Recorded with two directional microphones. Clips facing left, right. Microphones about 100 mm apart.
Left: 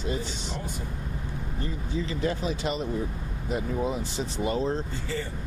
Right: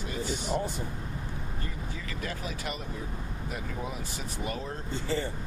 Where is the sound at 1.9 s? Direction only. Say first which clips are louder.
Left 12 dB; 25° left (ahead or behind).